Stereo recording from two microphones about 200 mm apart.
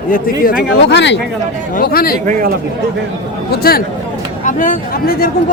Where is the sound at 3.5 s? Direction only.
50° left (ahead or behind).